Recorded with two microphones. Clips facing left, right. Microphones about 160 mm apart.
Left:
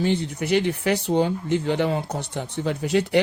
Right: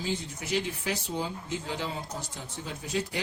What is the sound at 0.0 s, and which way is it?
Speech, 65° left (ahead or behind).